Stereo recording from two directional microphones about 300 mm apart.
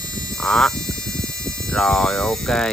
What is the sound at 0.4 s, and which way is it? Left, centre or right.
Speech, centre.